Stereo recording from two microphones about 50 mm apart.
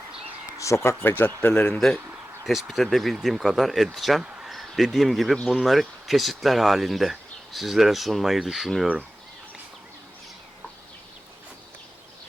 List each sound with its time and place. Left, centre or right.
0.6 s speech: left
1.1 s speech: left
1.5 s speech: left
2.4 s speech: centre
4.2 s speech: centre
4.4 s speech: centre